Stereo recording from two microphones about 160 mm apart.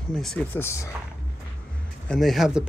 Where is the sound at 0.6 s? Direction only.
15° left (ahead or behind).